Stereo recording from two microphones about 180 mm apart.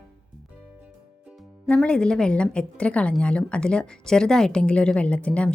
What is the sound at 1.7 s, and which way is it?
A woman's voice, 5° left (ahead or behind).